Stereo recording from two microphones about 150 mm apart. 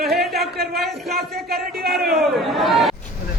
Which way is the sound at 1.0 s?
90° right.